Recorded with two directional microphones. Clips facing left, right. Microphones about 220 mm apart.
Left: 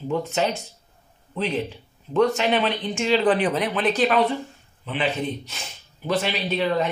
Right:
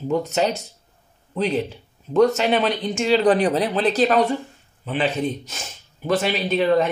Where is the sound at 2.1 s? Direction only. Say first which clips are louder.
Right 3 dB; 40° right (ahead or behind).